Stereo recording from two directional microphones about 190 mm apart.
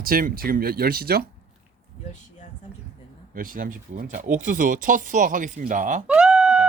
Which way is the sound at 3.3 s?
45° right (ahead or behind).